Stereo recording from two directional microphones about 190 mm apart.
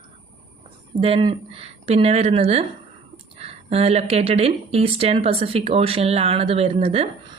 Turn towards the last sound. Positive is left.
turn(degrees=-30)  # may be behind; listen again after turning